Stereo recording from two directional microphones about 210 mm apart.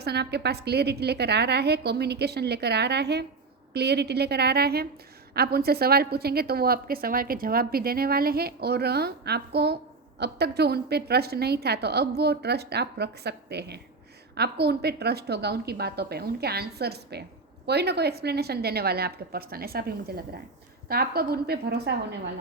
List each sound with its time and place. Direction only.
0.0 s a woman's voice: 50° right (ahead or behind)